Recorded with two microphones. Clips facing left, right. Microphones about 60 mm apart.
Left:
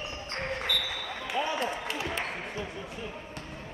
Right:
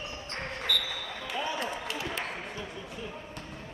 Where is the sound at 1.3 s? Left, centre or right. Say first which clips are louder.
Left 3 dB; left.